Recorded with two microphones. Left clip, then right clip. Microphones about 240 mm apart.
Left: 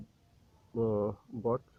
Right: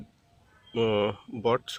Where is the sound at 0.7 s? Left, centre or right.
Right.